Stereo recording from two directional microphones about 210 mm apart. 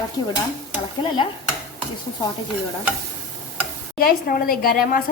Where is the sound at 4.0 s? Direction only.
45° left (ahead or behind).